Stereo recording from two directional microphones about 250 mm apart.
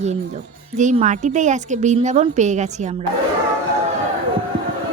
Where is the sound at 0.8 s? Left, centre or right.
Right.